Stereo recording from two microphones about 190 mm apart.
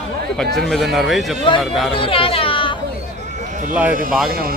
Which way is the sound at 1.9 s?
30° left (ahead or behind).